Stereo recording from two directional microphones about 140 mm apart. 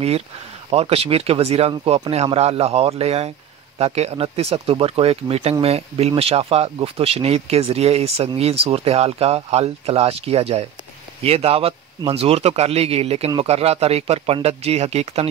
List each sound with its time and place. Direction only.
0.7 s speech: 45° right (ahead or behind)